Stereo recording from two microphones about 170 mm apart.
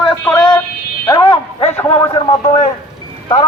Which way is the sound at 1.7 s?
15° left (ahead or behind).